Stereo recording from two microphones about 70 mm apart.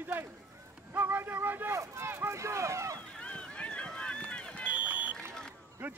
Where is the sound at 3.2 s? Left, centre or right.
Centre.